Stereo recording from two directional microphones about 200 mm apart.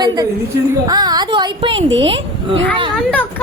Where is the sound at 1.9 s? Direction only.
70° right (ahead or behind).